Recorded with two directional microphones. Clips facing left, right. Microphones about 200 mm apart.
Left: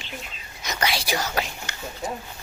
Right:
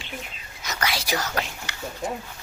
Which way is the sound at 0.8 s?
30° left (ahead or behind).